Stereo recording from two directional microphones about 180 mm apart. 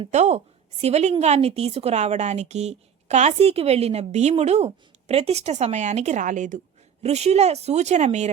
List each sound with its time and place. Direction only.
0.0 s a woman's voice: 40° right (ahead or behind)